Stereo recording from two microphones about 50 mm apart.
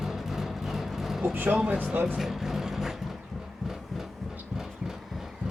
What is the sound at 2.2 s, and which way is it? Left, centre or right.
Vehicle, centre.